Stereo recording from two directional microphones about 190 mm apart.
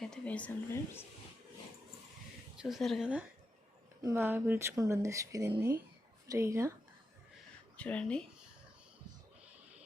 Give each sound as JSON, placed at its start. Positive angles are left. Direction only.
{"t": 0.0, "sound": "speech", "side_deg": 5}
{"t": 2.6, "sound": "a woman's voice", "side_deg": 0}
{"t": 7.8, "sound": "a woman's voice", "side_deg": 5}